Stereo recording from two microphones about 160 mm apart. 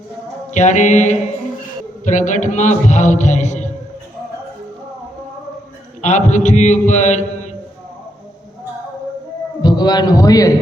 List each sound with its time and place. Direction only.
0.5 s speech: 50° left (ahead or behind)
6.0 s speech: 45° left (ahead or behind)
9.6 s a man's voice: 25° left (ahead or behind)